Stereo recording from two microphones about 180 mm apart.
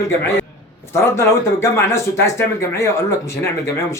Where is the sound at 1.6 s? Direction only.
15° left (ahead or behind).